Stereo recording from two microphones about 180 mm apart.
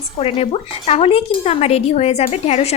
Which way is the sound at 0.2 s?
35° left (ahead or behind).